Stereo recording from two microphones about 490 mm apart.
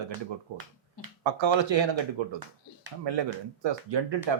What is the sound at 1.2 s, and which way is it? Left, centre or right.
Speech, right.